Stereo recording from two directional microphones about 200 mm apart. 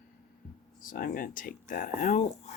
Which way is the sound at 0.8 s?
45° left (ahead or behind).